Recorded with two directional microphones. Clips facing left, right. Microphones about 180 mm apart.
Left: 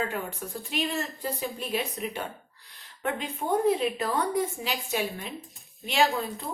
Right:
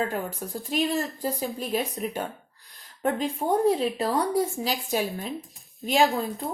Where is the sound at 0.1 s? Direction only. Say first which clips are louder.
Right 3 dB; 40° right (ahead or behind).